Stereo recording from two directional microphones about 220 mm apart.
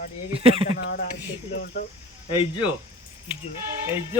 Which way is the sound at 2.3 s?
25° left (ahead or behind).